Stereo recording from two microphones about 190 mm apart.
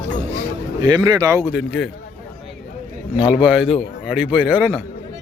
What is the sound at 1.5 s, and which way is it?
Speech, 5° right (ahead or behind).